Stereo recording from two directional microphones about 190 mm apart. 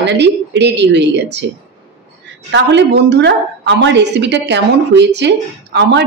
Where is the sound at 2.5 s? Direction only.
65° right (ahead or behind).